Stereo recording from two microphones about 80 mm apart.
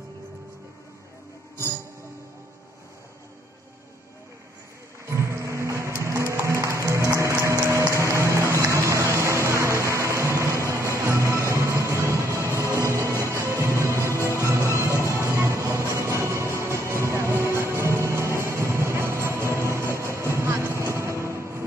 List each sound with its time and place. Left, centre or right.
5.0 s music: right